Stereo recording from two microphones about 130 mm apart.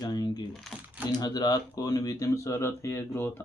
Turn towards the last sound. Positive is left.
turn(degrees=15)  # may be behind; listen again after turning